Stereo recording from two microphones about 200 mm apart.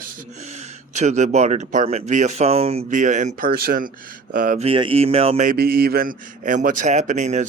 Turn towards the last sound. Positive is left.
turn(degrees=-35)  # may be behind; listen again after turning